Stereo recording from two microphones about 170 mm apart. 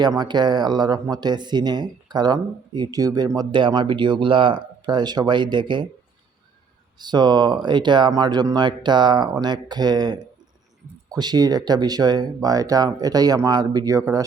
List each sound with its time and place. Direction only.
0.0 s speech: 25° right (ahead or behind)
7.0 s speech: 25° right (ahead or behind)